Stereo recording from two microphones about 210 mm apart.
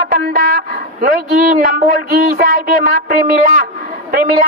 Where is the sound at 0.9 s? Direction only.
40° right (ahead or behind).